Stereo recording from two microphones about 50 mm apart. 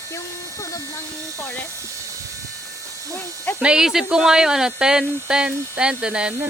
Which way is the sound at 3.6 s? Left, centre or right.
Centre.